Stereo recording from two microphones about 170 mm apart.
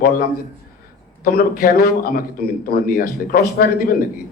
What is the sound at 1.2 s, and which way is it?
A man's voice, 60° left (ahead or behind).